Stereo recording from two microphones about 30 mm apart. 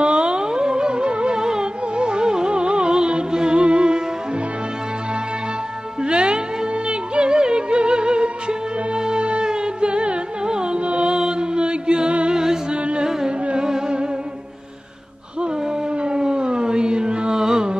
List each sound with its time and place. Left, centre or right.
0.0 s music: right
1.4 s music: right
6.0 s music: right
11.1 s mantra: right
12.3 s music: centre
13.7 s music: right
16.0 s music: right